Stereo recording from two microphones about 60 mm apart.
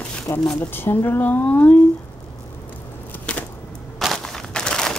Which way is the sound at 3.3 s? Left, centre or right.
Left.